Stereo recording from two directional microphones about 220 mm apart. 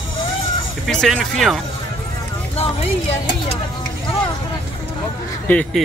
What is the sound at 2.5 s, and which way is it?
Speech, 30° left (ahead or behind).